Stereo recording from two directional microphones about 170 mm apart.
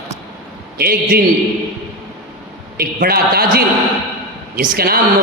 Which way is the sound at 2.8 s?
60° right (ahead or behind).